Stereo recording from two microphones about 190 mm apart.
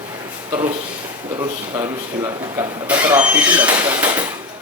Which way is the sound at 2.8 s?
10° right (ahead or behind).